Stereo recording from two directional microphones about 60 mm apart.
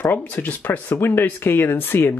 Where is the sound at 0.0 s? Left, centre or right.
Left.